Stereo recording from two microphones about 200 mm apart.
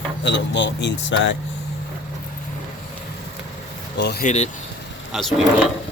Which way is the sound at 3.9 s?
55° left (ahead or behind).